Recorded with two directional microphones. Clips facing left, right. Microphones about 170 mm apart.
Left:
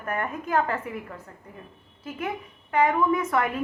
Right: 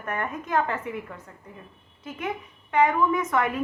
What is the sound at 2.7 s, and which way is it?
Speech, 35° left (ahead or behind).